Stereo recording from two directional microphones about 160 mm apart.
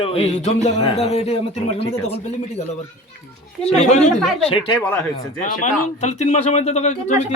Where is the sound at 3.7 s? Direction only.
45° left (ahead or behind).